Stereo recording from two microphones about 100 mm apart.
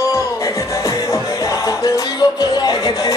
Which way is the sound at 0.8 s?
30° left (ahead or behind).